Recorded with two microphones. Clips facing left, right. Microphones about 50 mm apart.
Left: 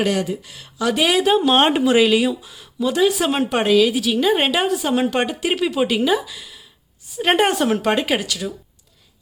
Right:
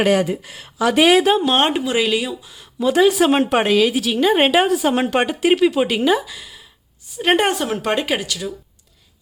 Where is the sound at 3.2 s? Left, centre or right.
Right; by 7.7 s centre.